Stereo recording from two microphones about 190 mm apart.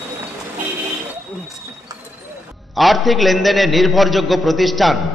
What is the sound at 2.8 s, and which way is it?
A man's voice, centre (ahead or behind).